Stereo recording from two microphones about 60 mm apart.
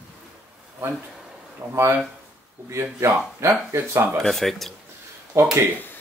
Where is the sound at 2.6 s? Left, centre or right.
Right.